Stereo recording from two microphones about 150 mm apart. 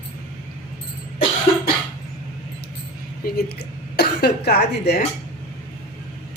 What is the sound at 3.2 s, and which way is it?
Speech, 90° left.